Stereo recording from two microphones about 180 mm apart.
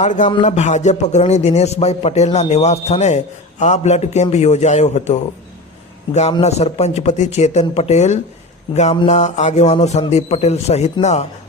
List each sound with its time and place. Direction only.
0.0 s music: 45° left (ahead or behind)
0.4 s a man's voice: 40° left (ahead or behind)